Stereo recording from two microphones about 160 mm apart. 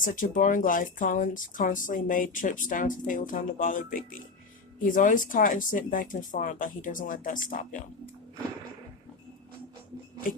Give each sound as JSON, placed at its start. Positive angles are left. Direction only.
{"t": 0.0, "sound": "speech", "side_deg": 55}